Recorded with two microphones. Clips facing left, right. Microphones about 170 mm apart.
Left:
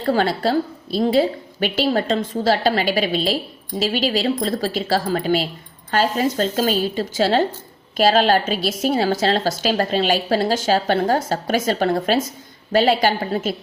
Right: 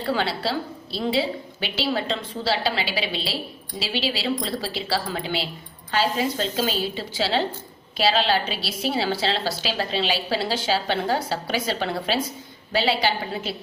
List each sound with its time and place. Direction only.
0.0 s a woman's voice: 45° left (ahead or behind)